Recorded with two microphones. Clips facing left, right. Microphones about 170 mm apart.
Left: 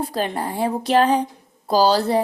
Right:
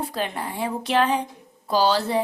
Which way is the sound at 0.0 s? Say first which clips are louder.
Left 4 dB; 40° left (ahead or behind).